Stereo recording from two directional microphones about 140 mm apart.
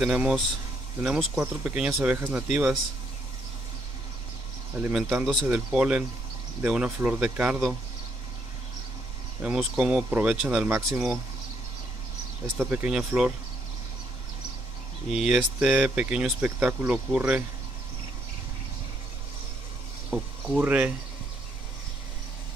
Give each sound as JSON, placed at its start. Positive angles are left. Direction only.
{"t": 0.0, "sound": "speech", "side_deg": -5}
{"t": 4.7, "sound": "speech", "side_deg": -10}
{"t": 5.2, "sound": "speech", "side_deg": 0}
{"t": 9.4, "sound": "speech", "side_deg": -10}
{"t": 12.5, "sound": "speech", "side_deg": -10}
{"t": 15.0, "sound": "speech", "side_deg": -5}
{"t": 20.1, "sound": "speech", "side_deg": -10}